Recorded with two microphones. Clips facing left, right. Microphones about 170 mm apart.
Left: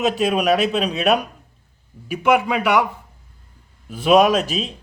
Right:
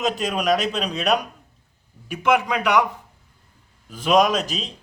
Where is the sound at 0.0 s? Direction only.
10° left (ahead or behind).